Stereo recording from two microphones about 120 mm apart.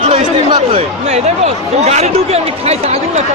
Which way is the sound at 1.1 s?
65° right (ahead or behind).